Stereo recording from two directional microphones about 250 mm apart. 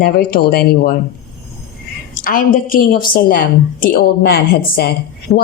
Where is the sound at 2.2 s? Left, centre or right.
Left.